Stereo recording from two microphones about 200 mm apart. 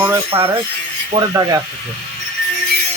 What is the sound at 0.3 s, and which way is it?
Speech, 30° right (ahead or behind).